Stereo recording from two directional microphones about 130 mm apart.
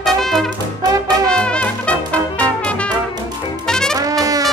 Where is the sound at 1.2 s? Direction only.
5° left (ahead or behind).